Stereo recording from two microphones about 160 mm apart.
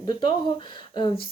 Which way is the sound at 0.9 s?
30° left (ahead or behind).